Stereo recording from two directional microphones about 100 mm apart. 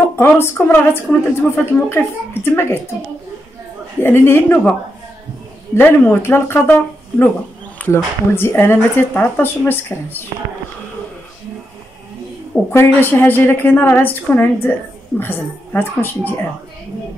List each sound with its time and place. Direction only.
0.1 s a woman's voice: 25° left (ahead or behind)
4.0 s a woman's voice: 20° left (ahead or behind)
5.8 s a woman's voice: 25° left (ahead or behind)
12.7 s a woman's voice: 20° left (ahead or behind)